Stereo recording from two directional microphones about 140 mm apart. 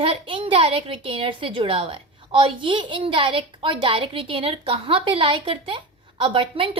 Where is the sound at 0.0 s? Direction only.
40° right (ahead or behind).